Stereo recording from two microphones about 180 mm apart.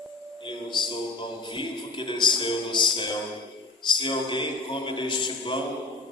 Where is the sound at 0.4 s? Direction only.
25° left (ahead or behind).